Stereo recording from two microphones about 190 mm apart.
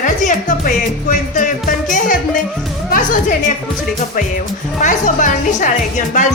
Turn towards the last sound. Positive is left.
turn(degrees=40)  # may be behind; listen again after turning